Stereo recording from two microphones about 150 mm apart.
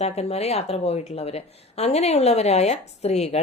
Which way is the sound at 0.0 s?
45° left (ahead or behind).